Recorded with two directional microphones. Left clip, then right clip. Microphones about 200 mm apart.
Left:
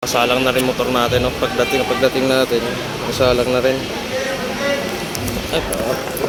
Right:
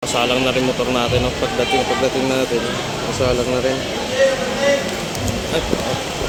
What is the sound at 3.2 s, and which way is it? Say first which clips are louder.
Speech: left 4 dB; 5° left (ahead or behind).